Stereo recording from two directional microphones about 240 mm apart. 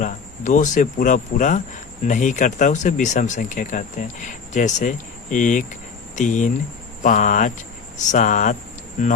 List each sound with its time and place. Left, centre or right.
0.0 s speech: left